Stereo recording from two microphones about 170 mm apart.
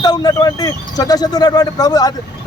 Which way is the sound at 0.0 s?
20° left (ahead or behind).